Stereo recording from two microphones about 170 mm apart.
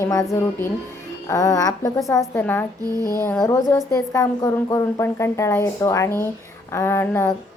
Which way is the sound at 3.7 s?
20° left (ahead or behind).